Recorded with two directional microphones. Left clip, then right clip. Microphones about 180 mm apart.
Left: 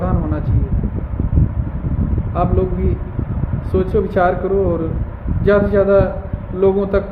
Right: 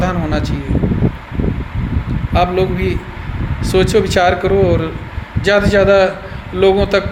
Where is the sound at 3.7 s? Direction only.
15° right (ahead or behind).